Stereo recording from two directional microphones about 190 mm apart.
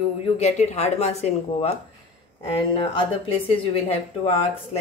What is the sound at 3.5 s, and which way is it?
Speech, 30° left (ahead or behind).